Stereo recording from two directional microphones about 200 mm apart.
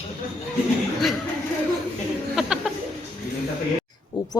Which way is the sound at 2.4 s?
Centre (ahead or behind).